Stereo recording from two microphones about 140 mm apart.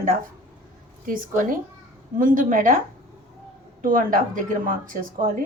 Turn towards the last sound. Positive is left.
turn(degrees=-75)  # may be behind; listen again after turning